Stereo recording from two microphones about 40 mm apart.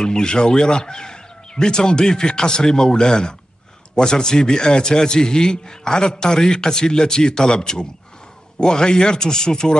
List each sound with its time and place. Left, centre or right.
0.0 s a man's voice: centre